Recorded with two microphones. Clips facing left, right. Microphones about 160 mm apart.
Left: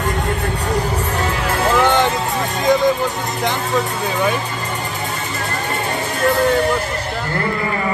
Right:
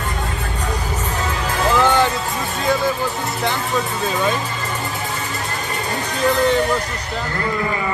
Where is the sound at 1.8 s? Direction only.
20° left (ahead or behind).